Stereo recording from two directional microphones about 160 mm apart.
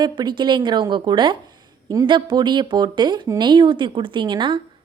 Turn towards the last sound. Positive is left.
turn(degrees=-30)  # may be behind; listen again after turning